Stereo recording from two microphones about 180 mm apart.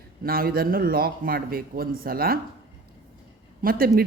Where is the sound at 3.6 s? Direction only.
55° right (ahead or behind).